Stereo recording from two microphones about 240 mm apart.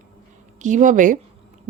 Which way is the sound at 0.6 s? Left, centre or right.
Right.